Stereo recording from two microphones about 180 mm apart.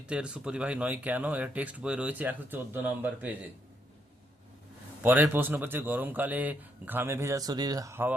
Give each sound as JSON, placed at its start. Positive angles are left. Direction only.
{"t": 0.1, "sound": "speech", "side_deg": -5}
{"t": 5.0, "sound": "speech", "side_deg": -10}